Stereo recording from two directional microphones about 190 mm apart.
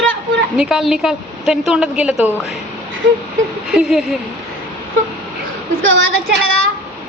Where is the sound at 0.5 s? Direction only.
Centre (ahead or behind).